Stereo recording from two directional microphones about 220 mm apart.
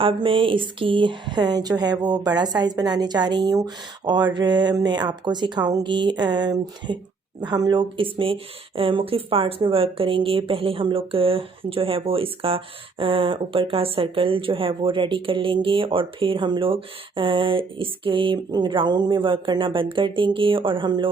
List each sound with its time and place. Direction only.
0.0 s speech: 25° right (ahead or behind)